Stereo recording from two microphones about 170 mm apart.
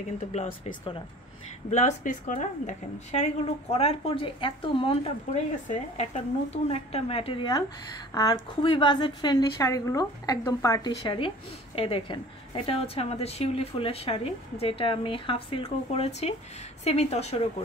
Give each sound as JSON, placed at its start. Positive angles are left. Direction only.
{"t": 0.3, "sound": "a woman's voice", "side_deg": 40}
{"t": 11.1, "sound": "a woman's voice", "side_deg": 30}